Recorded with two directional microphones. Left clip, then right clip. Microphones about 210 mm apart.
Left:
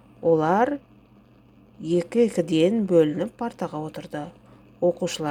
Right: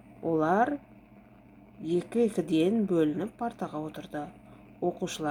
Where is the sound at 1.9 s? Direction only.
30° left (ahead or behind).